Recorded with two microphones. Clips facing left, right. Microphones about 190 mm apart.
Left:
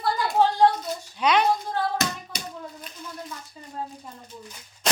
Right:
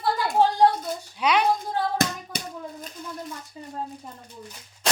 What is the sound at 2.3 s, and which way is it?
Hands, 55° right (ahead or behind).